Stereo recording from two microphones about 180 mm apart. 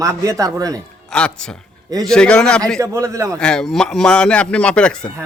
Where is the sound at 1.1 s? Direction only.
5° left (ahead or behind).